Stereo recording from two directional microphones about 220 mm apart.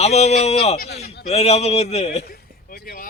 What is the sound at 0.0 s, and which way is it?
A man's voice, 30° left (ahead or behind).